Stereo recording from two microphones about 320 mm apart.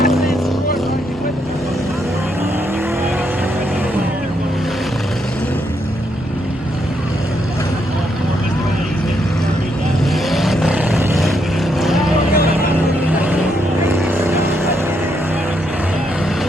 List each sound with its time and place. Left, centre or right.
0.0 s vehicle: left
10.2 s vehicle: centre
13.9 s vehicle: centre